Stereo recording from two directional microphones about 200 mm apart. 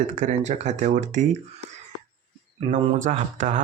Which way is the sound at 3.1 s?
35° right (ahead or behind).